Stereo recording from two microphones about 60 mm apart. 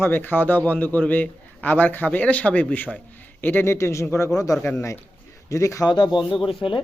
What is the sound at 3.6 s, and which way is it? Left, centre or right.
Speech, left.